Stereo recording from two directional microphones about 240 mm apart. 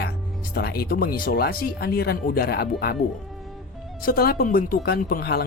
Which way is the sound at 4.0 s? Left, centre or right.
Left.